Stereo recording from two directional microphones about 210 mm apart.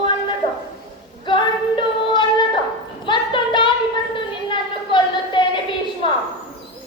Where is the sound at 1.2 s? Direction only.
25° left (ahead or behind).